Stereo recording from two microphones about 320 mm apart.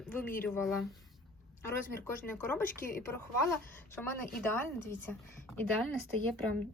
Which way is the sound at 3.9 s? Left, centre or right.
Centre.